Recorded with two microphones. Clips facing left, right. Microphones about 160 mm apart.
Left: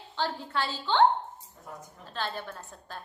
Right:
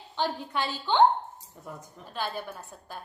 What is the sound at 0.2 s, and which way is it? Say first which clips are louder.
Speech: right 1 dB; 15° right (ahead or behind).